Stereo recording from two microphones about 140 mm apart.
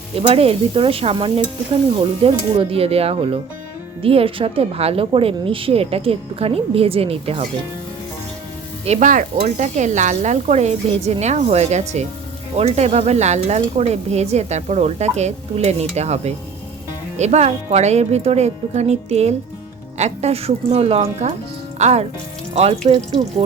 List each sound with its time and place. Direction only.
0.2 s sizzle: 45° right (ahead or behind)
4.0 s a woman's voice: 40° right (ahead or behind)
8.8 s a woman's voice: 55° right (ahead or behind)